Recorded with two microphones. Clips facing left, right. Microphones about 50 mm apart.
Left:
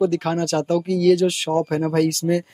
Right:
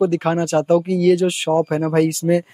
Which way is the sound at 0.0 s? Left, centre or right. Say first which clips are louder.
Right 2 dB; right.